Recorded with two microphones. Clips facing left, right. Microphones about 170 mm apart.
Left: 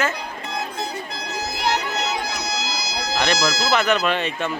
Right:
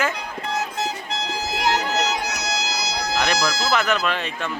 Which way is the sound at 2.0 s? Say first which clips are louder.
Right 1 dB; 80° right.